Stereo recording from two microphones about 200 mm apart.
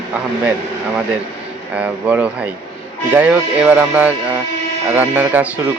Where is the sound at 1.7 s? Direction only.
5° right (ahead or behind).